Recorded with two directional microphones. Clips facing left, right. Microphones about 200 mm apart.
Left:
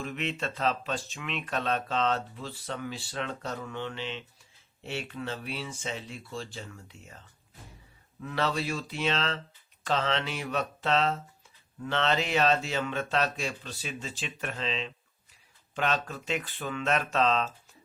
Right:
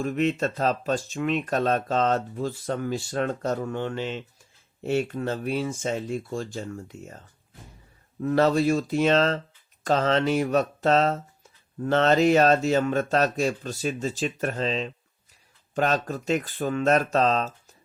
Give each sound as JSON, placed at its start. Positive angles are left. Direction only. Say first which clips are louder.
{"t": 0.0, "sound": "speech", "louder": "right 9 dB", "side_deg": -45}
{"t": 8.2, "sound": "speech", "louder": "right 10 dB", "side_deg": -45}